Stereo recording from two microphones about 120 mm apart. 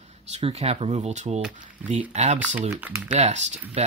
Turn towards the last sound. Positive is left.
turn(degrees=-70)  # may be behind; listen again after turning